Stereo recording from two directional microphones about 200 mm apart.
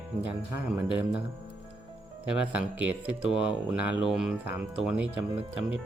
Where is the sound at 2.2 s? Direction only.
5° right (ahead or behind).